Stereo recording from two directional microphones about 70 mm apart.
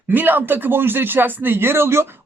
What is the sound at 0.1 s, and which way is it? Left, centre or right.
Speech, right.